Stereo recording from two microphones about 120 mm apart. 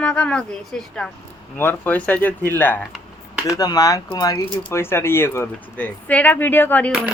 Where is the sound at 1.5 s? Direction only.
15° left (ahead or behind).